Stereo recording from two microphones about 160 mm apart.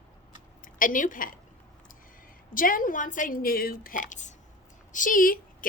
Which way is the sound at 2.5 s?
60° left (ahead or behind).